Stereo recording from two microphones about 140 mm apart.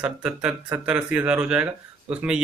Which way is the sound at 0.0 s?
5° right (ahead or behind).